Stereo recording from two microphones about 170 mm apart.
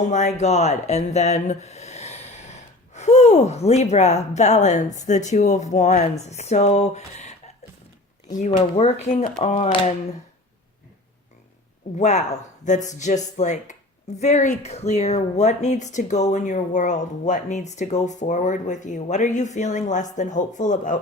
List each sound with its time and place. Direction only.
0.0 s speech: 45° left (ahead or behind)
8.5 s speech: 40° left (ahead or behind)
11.9 s speech: 40° left (ahead or behind)